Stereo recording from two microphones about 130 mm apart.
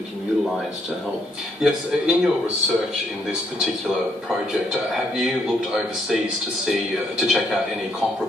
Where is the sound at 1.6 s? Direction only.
Centre (ahead or behind).